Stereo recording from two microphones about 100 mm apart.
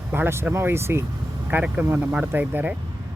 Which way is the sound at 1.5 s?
15° right (ahead or behind).